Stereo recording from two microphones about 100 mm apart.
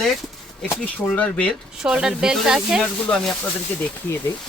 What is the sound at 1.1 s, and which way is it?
Speech, 15° left (ahead or behind).